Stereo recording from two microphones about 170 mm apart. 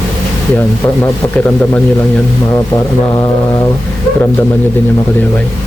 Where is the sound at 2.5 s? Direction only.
20° left (ahead or behind).